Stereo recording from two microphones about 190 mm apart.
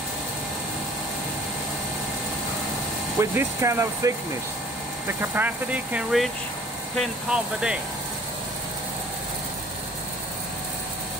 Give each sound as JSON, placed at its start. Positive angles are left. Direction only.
{"t": 3.2, "sound": "speech", "side_deg": -15}